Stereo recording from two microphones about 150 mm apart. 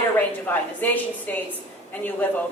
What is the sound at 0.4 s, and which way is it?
Speech, 10° left (ahead or behind).